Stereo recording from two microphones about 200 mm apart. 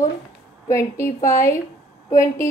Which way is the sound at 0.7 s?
15° left (ahead or behind).